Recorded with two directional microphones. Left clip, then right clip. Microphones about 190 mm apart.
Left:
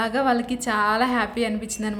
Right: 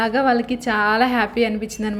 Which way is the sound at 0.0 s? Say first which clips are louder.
Right 4 dB; 5° right (ahead or behind).